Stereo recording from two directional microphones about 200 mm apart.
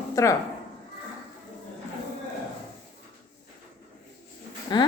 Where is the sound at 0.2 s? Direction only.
15° left (ahead or behind).